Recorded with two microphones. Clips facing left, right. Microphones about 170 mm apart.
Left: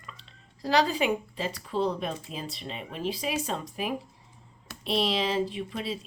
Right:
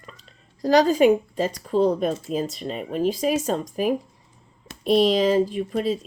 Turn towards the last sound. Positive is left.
turn(degrees=-45)  # may be behind; listen again after turning